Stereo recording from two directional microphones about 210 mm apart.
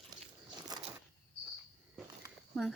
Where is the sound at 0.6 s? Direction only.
20° right (ahead or behind).